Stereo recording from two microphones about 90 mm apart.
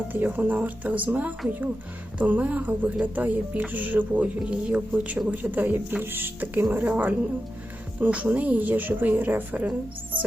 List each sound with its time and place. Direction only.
0.1 s a woman's voice: 20° right (ahead or behind)